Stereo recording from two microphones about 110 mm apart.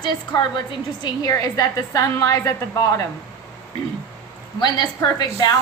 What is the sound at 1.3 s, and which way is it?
A woman's voice, 30° left (ahead or behind).